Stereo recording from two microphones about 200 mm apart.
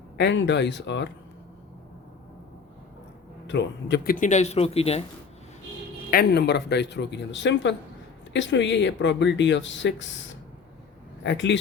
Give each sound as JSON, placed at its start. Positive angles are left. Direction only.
{"t": 0.2, "sound": "speech", "side_deg": 60}
{"t": 3.4, "sound": "speech", "side_deg": 60}
{"t": 6.1, "sound": "speech", "side_deg": 55}
{"t": 11.2, "sound": "speech", "side_deg": 60}